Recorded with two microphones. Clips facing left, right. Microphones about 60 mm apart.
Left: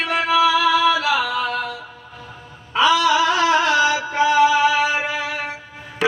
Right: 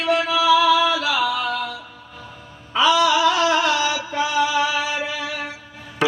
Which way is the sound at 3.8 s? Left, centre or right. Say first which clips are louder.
Left 4 dB; left.